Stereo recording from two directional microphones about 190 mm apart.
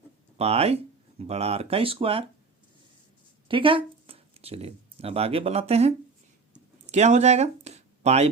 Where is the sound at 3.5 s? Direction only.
25° right (ahead or behind).